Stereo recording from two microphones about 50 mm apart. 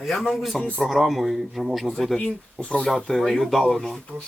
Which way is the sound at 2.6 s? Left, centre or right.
Left.